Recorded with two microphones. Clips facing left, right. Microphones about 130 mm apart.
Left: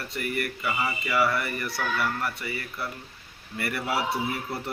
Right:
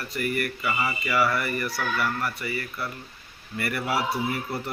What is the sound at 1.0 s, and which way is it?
Speech, 20° left (ahead or behind).